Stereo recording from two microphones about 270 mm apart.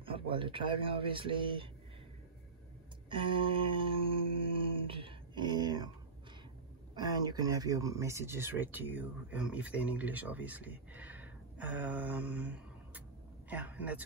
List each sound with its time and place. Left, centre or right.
0.0 s speech: centre
3.1 s speech: centre
4.4 s a sound: centre
7.0 s speech: centre